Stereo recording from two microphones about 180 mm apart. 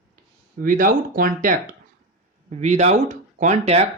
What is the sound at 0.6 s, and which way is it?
A man's voice, 50° right (ahead or behind).